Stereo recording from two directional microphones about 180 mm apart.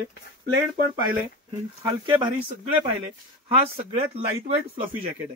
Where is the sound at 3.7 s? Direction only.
35° right (ahead or behind).